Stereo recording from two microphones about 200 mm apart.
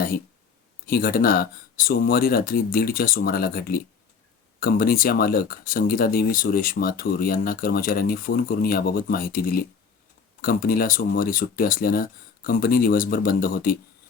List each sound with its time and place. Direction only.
0.9 s speech: 50° left (ahead or behind)